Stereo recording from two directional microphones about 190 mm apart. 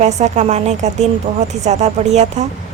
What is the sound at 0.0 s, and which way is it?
Speech, 35° right (ahead or behind).